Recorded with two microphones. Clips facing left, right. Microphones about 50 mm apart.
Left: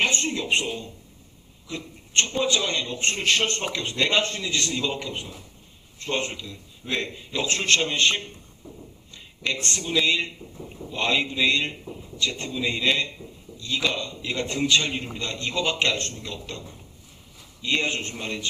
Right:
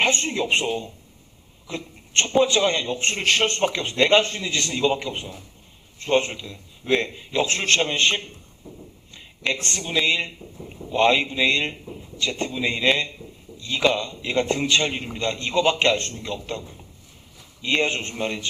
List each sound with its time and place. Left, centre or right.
0.0 s speech: right
1.6 s a sound: right
2.4 s a man's voice: right